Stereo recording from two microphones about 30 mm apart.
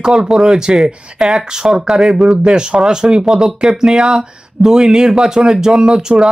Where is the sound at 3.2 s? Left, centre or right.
Centre.